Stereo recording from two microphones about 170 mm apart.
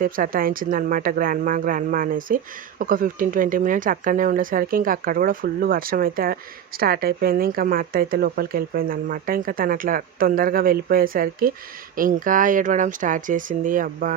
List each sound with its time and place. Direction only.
0.0 s speech: 55° right (ahead or behind)